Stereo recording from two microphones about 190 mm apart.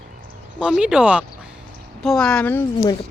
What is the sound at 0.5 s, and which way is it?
Speech, 5° right (ahead or behind).